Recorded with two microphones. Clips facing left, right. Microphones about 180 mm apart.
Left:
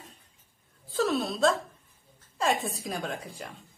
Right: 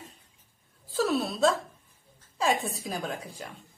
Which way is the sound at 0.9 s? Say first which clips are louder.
Even; 5° right (ahead or behind).